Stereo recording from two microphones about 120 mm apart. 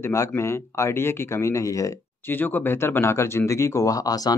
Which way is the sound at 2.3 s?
15° left (ahead or behind).